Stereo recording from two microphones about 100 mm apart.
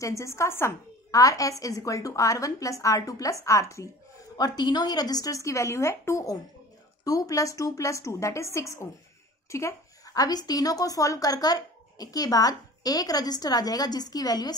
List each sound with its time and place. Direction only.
0.0 s a woman's voice: 30° left (ahead or behind)
4.4 s a woman's voice: 45° left (ahead or behind)